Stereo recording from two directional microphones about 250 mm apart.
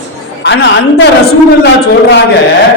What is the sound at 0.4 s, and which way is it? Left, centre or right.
Speech, left.